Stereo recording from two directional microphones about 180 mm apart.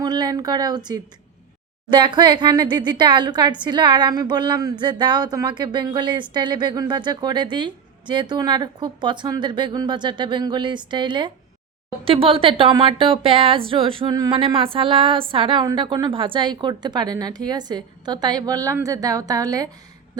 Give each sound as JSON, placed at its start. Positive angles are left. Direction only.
{"t": 0.0, "sound": "speech", "side_deg": -20}